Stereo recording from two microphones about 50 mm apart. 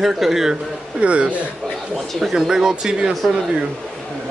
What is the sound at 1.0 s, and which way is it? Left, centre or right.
Speech, right.